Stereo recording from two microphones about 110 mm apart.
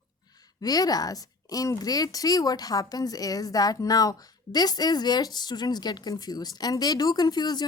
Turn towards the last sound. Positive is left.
turn(degrees=40)  # may be behind; listen again after turning